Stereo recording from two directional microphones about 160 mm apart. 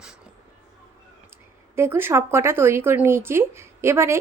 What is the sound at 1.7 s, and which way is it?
Speech, 15° right (ahead or behind).